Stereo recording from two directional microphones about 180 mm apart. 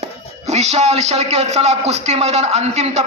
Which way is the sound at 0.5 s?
40° right (ahead or behind).